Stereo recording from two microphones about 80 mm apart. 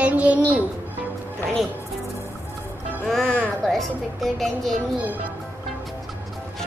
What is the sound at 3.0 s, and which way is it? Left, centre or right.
A child's voice, centre.